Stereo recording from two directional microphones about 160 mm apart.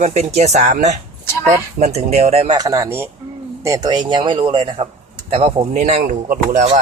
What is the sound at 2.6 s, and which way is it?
A man's voice, 20° right (ahead or behind).